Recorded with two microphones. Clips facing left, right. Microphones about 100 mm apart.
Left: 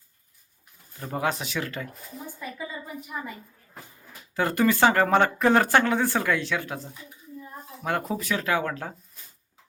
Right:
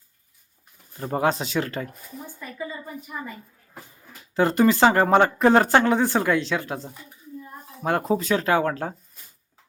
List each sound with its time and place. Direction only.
0.9 s speech: 30° right (ahead or behind)
3.1 s a woman's voice: 15° left (ahead or behind)
4.4 s speech: 30° right (ahead or behind)